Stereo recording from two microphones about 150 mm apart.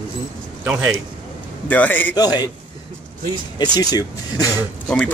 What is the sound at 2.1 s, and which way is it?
Speech, 25° left (ahead or behind).